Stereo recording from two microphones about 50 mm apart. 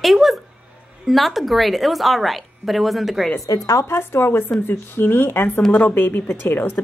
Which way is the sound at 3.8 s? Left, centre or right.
Left.